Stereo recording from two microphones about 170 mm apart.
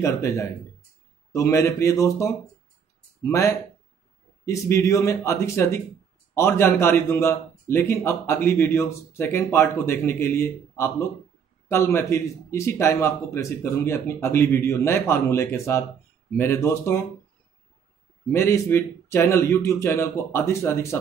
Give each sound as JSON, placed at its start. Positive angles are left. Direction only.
{"t": 0.0, "sound": "a man's voice", "side_deg": 20}
{"t": 18.3, "sound": "a man's voice", "side_deg": 15}